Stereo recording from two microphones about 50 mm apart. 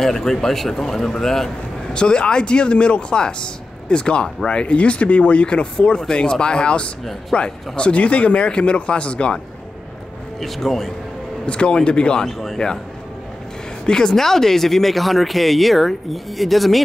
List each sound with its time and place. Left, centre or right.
0.0 s speech: centre; by 9.4 s left
10.4 s speech: centre
11.4 s speech: left
12.3 s speech: centre
13.8 s speech: centre